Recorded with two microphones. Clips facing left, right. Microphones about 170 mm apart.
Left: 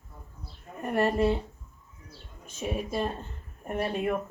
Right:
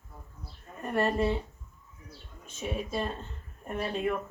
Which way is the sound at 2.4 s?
10° left (ahead or behind).